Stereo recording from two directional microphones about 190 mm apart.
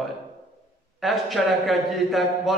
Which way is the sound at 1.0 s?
Centre (ahead or behind).